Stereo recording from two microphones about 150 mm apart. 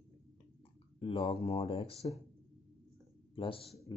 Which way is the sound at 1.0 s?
35° left (ahead or behind).